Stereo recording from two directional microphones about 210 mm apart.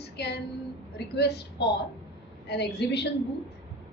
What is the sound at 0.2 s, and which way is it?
A woman's voice, 50° left (ahead or behind).